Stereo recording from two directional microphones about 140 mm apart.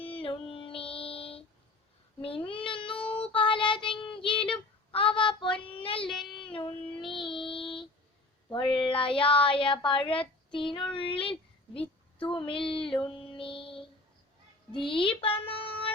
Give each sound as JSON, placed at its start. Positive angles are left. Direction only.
{"t": 0.2, "sound": "music", "side_deg": 40}
{"t": 2.2, "sound": "child singing", "side_deg": 40}
{"t": 3.0, "sound": "child singing", "side_deg": 10}
{"t": 3.2, "sound": "child singing", "side_deg": 40}
{"t": 8.7, "sound": "speech", "side_deg": 40}
{"t": 13.3, "sound": "music", "side_deg": 40}
{"t": 14.8, "sound": "speech", "side_deg": 35}